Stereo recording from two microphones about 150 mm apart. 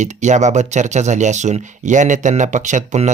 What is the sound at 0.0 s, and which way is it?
Speech, 55° right (ahead or behind).